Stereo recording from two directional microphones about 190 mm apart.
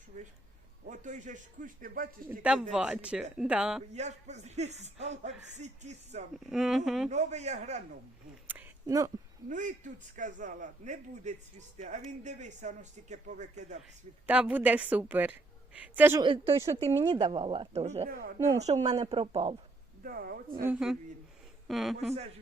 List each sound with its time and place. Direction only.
0.9 s speech: 40° right (ahead or behind)
2.4 s speech: 5° right (ahead or behind)
3.9 s speech: 35° right (ahead or behind)
6.4 s speech: centre (ahead or behind)
7.1 s speech: 35° right (ahead or behind)
8.4 s speech: 15° right (ahead or behind)
9.5 s speech: 40° right (ahead or behind)
14.3 s a woman's voice: 10° right (ahead or behind)
16.2 s a woman's voice: 30° right (ahead or behind)
18.1 s a woman's voice: 50° right (ahead or behind)
18.6 s speech: 35° right (ahead or behind)
20.1 s a woman's voice: 50° right (ahead or behind)
20.7 s speech: 5° right (ahead or behind)